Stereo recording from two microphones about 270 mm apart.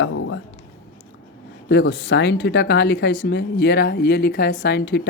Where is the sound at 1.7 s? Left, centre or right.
Left.